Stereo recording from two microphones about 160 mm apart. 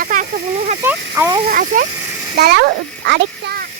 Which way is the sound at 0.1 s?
60° right (ahead or behind).